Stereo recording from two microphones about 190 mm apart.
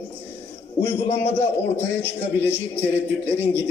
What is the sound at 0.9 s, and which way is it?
Speech, 30° left (ahead or behind).